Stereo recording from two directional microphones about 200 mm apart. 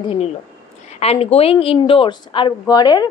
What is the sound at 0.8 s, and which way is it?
A woman's voice, 30° left (ahead or behind).